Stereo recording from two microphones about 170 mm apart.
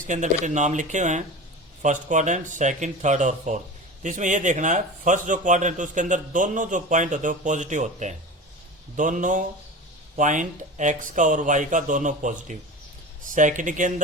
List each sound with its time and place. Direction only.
0.0 s a man's voice: 45° right (ahead or behind)